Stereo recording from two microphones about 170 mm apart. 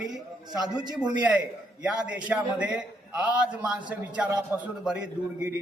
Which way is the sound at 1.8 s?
10° right (ahead or behind).